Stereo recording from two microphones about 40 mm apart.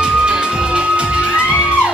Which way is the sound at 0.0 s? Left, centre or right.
Right.